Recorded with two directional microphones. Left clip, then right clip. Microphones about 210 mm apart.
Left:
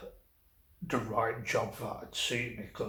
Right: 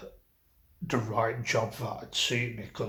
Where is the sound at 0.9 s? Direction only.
35° right (ahead or behind).